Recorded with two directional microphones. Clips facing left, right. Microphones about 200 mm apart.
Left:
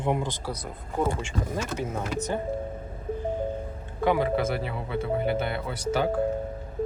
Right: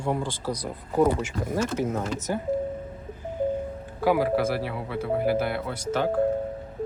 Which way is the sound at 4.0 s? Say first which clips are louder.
Right 2 dB; 5° right (ahead or behind).